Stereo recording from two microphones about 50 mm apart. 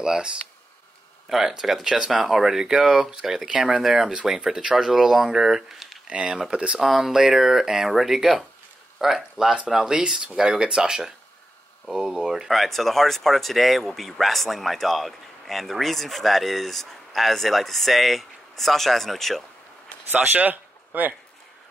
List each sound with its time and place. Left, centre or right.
0.0 s speech: centre
1.3 s speech: centre
6.0 s speech: centre
6.8 s speech: centre
9.9 s speech: centre
12.5 s speech: centre
20.1 s speech: right